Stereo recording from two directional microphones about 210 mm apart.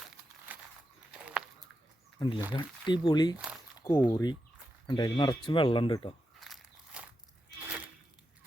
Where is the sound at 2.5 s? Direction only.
20° left (ahead or behind).